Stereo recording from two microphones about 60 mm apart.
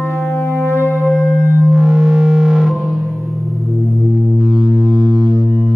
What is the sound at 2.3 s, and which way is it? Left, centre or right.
Music, centre.